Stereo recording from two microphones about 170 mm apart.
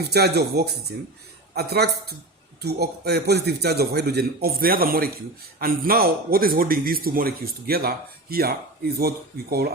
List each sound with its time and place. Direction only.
0.0 s a man's voice: 70° right (ahead or behind)